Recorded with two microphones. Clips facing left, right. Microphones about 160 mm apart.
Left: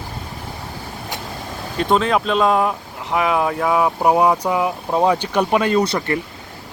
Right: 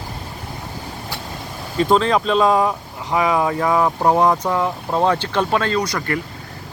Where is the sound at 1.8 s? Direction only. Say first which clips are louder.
Right 1 dB; centre (ahead or behind); by 6.2 s 25° left (ahead or behind).